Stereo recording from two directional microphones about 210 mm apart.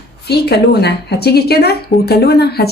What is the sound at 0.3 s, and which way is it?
Speech, 50° left (ahead or behind).